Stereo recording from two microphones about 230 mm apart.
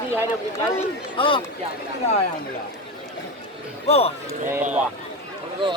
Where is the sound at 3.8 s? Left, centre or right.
Left.